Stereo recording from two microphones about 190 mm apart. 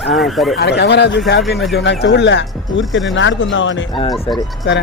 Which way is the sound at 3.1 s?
85° left.